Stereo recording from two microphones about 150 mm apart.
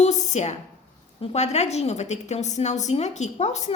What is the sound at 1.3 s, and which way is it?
A woman's voice, 45° left (ahead or behind).